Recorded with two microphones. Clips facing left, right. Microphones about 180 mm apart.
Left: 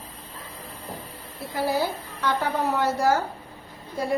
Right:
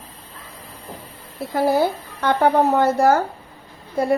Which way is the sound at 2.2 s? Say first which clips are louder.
Right 8 dB; 55° right (ahead or behind).